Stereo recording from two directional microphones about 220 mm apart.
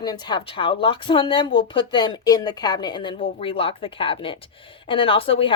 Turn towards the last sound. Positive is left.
turn(degrees=25)  # may be behind; listen again after turning